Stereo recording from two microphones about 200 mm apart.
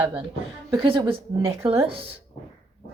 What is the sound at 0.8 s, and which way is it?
A woman's voice, 25° right (ahead or behind).